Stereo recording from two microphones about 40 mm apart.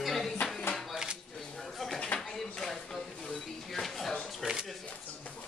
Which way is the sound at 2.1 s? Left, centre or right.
Left.